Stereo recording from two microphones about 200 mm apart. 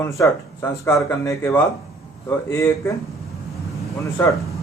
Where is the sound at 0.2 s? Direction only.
15° left (ahead or behind).